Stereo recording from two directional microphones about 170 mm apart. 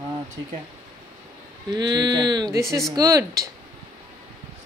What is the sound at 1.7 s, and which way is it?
Speech, 25° right (ahead or behind).